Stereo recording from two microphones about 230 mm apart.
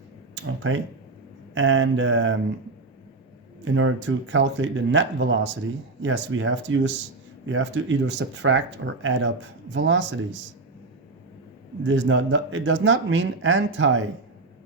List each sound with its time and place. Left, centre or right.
0.4 s a sound: right
1.5 s speech: right
3.6 s speech: right
11.8 s speech: right